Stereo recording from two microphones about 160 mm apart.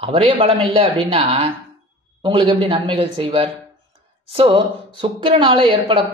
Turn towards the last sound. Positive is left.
turn(degrees=-35)  # may be behind; listen again after turning